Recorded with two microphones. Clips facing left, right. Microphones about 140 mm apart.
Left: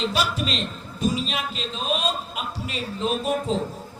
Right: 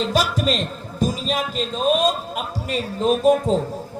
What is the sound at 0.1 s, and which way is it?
Speech, 45° right (ahead or behind).